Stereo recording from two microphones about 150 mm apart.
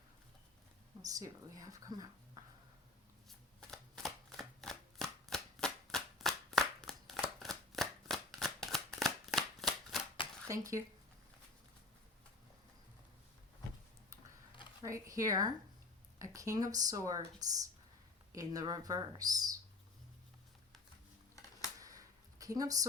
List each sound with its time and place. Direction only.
1.0 s speech: 25° right (ahead or behind)
3.2 s shuffling cards: centre (ahead or behind)
9.0 s a sound: centre (ahead or behind)
10.5 s speech: 20° right (ahead or behind)
14.8 s speech: 20° right (ahead or behind)
18.3 s speech: 25° right (ahead or behind)
21.8 s a sound: 20° right (ahead or behind)